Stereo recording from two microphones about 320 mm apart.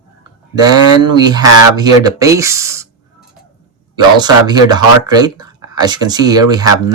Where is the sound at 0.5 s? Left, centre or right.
Centre.